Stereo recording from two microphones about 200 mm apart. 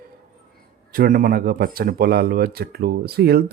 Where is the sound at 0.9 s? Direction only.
45° right (ahead or behind).